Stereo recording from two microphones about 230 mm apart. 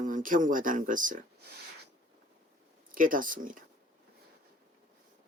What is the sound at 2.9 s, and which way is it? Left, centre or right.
Speech, right.